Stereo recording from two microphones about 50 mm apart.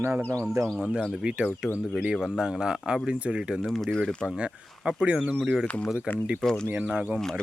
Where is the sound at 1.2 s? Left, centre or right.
Right.